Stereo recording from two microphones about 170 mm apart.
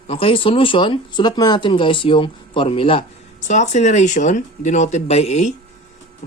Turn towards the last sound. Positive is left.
turn(degrees=40)  # may be behind; listen again after turning